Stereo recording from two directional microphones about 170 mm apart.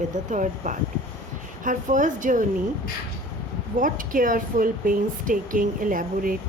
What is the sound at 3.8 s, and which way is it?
Speech, 55° right (ahead or behind).